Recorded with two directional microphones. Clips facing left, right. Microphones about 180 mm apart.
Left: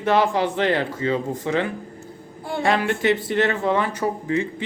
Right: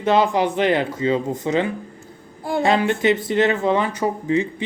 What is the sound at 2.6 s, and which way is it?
A man's voice, 20° right (ahead or behind).